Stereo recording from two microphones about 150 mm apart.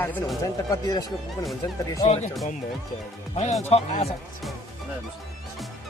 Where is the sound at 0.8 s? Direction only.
25° left (ahead or behind).